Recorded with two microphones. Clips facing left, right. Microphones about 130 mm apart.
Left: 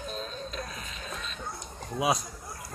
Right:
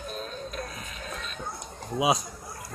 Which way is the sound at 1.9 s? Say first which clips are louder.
Right 3 dB; 15° right (ahead or behind).